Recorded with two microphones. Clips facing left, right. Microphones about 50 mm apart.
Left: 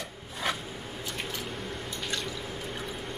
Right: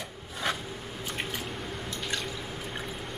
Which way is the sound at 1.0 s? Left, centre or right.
Centre.